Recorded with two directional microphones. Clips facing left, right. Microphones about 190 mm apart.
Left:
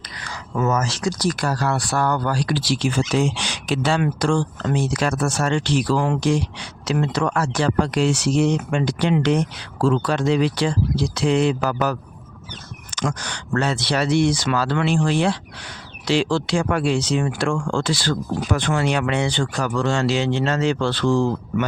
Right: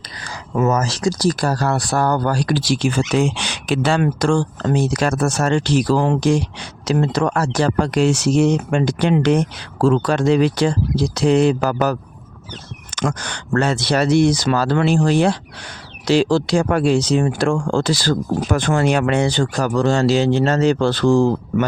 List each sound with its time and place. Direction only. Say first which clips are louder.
0.7 s speech: right 3 dB; 35° right (ahead or behind)
13.0 s speech: right 3 dB; 55° right (ahead or behind)